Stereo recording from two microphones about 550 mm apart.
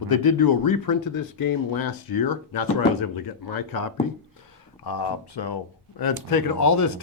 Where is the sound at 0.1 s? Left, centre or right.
Left.